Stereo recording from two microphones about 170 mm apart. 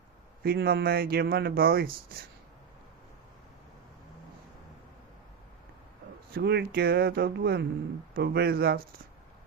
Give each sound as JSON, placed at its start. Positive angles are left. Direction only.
{"t": 0.4, "sound": "speech", "side_deg": -65}
{"t": 6.3, "sound": "a sound", "side_deg": -75}
{"t": 8.1, "sound": "speech", "side_deg": -70}